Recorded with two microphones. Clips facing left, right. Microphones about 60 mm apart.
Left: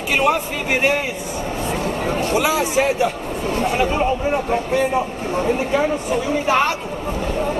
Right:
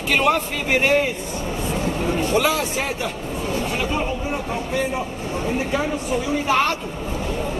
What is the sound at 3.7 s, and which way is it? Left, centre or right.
Speech, left.